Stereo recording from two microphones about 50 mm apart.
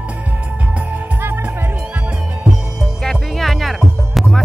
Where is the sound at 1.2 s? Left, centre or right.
Right.